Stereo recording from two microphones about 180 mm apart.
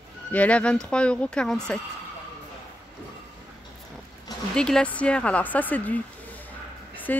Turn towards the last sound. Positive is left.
turn(degrees=10)  # may be behind; listen again after turning